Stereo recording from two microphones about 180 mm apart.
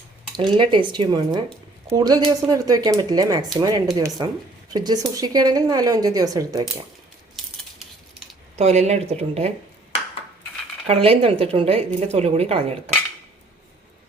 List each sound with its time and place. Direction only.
0.3 s a woman's voice: 25° right (ahead or behind)
8.5 s speech: 35° right (ahead or behind)
10.8 s speech: 35° right (ahead or behind)